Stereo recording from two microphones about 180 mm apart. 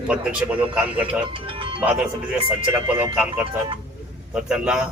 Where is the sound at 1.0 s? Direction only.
30° right (ahead or behind).